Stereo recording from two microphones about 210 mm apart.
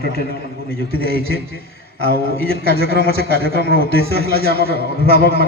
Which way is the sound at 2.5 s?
75° right (ahead or behind).